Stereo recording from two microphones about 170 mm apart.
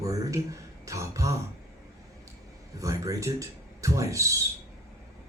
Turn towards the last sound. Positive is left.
turn(degrees=-20)  # may be behind; listen again after turning